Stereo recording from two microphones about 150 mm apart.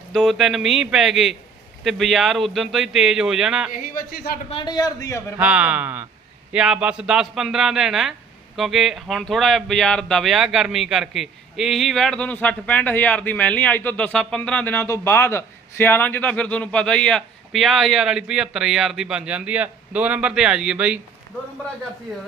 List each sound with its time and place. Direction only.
0.1 s speech: centre (ahead or behind)
3.7 s speech: 75° left (ahead or behind)
4.4 s a man's voice: 35° left (ahead or behind)
5.4 s speech: 10° right (ahead or behind)